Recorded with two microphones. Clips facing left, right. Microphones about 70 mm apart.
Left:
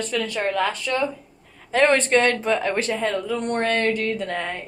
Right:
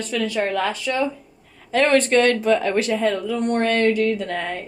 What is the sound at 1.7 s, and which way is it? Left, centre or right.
A woman's voice, left.